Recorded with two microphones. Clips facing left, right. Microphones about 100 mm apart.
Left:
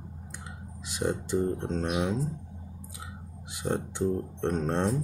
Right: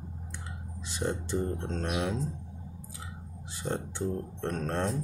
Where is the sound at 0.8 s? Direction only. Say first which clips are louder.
Left 3 dB; 10° left (ahead or behind).